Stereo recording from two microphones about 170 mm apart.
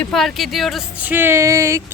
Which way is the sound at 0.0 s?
Centre (ahead or behind).